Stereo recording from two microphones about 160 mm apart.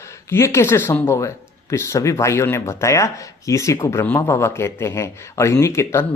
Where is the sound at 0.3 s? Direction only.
15° left (ahead or behind).